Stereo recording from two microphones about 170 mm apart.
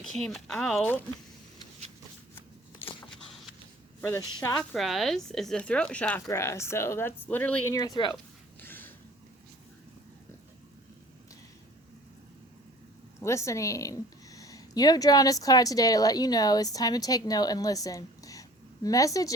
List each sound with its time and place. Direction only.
0.3 s speech: centre (ahead or behind)
4.0 s speech: 15° left (ahead or behind)
4.7 s speech: centre (ahead or behind)
7.8 s speech: 25° left (ahead or behind)
8.6 s a sound: 10° left (ahead or behind)
13.2 s a woman's voice: 15° left (ahead or behind)